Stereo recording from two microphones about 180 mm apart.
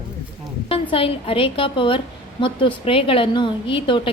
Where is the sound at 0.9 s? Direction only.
30° left (ahead or behind).